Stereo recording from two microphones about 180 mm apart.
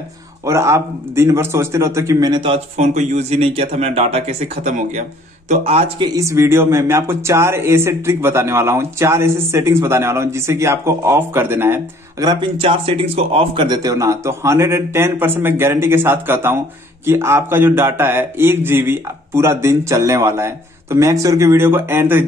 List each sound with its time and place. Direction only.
0.5 s a man's voice: 15° right (ahead or behind); by 6.0 s 35° right (ahead or behind)
6.0 s speech: 20° right (ahead or behind)